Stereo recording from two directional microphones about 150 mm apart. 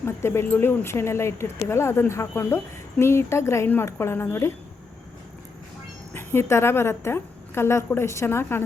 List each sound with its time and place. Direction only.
0.0 s speech: 15° left (ahead or behind)
6.1 s speech: 15° left (ahead or behind)